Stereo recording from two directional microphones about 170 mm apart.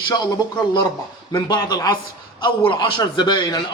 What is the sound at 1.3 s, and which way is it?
Speech, 25° left (ahead or behind).